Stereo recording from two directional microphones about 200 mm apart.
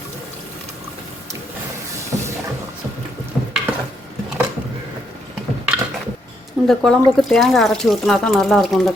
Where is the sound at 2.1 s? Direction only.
15° right (ahead or behind).